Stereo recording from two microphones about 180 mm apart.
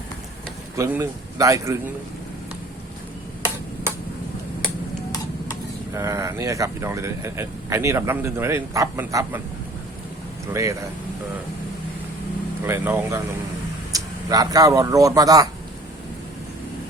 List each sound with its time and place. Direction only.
0.8 s speech: 15° right (ahead or behind)
5.9 s speech: 15° right (ahead or behind)
10.5 s speech: 15° right (ahead or behind)
12.6 s speech: 10° right (ahead or behind)